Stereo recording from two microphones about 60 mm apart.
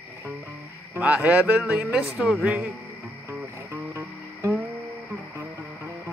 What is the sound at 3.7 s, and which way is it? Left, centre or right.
Music, right.